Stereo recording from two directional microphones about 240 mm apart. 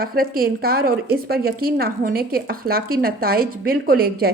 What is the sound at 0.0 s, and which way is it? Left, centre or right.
A woman's voice, right.